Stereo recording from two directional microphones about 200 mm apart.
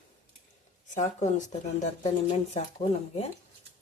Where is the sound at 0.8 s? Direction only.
35° left (ahead or behind).